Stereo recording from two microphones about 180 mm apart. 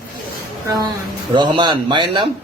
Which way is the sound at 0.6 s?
20° right (ahead or behind).